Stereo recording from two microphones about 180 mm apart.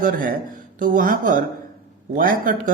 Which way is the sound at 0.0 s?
50° right (ahead or behind).